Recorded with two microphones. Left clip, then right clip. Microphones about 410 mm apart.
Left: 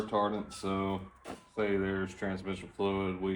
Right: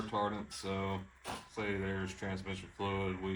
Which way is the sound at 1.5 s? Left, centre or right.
Centre.